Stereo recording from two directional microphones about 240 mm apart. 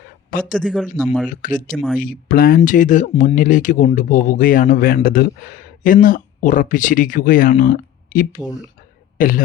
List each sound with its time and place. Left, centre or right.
0.3 s speech: left
0.6 s speech: centre
1.3 s speech: left
1.7 s speech: centre
2.0 s speech: left